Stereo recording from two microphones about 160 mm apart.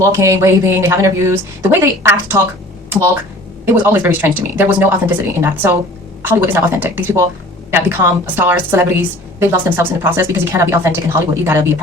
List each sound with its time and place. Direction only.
0.0 s a woman's voice: 20° right (ahead or behind)
3.7 s a woman's voice: 15° right (ahead or behind)